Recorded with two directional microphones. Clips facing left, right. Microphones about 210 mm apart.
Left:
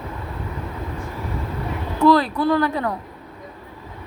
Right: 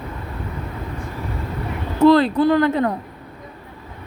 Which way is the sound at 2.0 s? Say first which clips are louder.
Right 3 dB; 25° right (ahead or behind).